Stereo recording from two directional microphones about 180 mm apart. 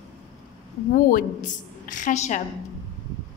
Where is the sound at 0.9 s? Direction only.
50° left (ahead or behind).